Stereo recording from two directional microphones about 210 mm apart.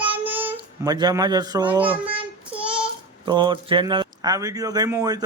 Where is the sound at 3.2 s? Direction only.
20° right (ahead or behind).